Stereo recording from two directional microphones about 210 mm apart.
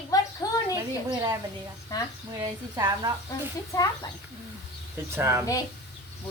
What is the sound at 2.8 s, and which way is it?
Speech, 20° right (ahead or behind).